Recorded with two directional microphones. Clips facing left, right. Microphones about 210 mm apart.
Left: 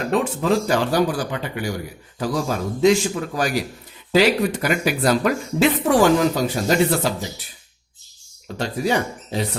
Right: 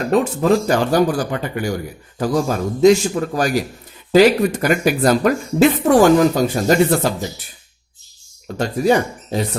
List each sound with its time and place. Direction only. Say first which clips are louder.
0.1 s speech: right 5 dB; 45° right (ahead or behind)
8.5 s speech: right 5 dB; 45° right (ahead or behind)